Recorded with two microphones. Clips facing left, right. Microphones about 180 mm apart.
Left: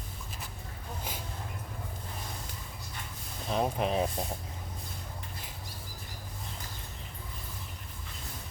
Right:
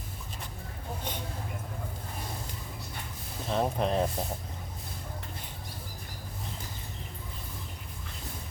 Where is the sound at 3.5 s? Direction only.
Centre (ahead or behind).